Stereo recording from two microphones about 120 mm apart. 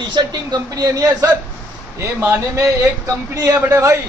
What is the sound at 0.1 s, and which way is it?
A man's voice, 35° right (ahead or behind).